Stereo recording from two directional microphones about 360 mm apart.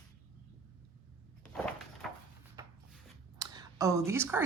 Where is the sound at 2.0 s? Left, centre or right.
Centre.